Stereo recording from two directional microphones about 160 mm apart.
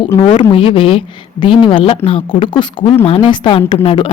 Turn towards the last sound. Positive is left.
turn(degrees=35)  # may be behind; listen again after turning